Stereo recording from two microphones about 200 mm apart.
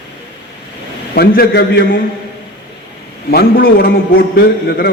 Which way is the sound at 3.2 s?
50° left (ahead or behind).